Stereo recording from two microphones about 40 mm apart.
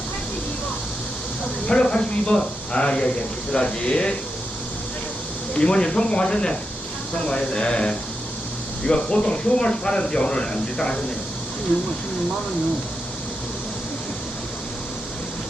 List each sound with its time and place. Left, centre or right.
1.6 s speech: left
5.5 s speech: left